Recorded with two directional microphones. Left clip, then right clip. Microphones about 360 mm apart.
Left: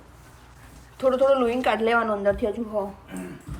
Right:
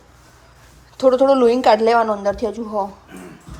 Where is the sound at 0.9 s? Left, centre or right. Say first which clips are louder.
Right 6 dB; centre.